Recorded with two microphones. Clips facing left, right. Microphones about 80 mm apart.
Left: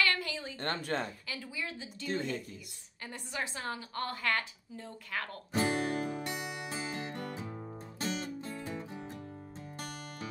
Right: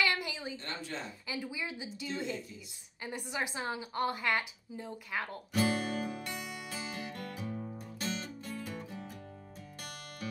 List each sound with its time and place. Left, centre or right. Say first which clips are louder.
0.0 s a sound: even; centre
0.6 s speech: left 7 dB; left
1.3 s a woman's voice: right 2 dB; centre
2.0 s speech: left 3 dB; left
3.0 s a woman's voice: right 2 dB; centre
5.5 s music: left 1 dB; left